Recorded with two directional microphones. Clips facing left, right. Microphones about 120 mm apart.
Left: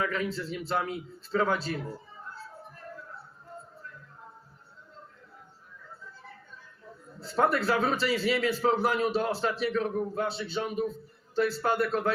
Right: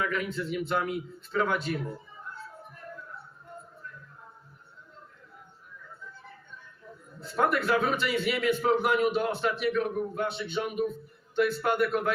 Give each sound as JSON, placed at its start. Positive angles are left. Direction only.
{"t": 0.0, "sound": "a man's voice", "side_deg": 30}
{"t": 7.2, "sound": "a man's voice", "side_deg": 30}